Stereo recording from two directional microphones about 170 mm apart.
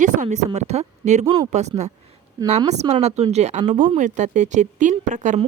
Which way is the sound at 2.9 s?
40° right (ahead or behind).